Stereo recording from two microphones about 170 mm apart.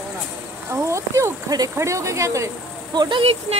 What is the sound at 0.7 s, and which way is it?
Speech, 15° right (ahead or behind).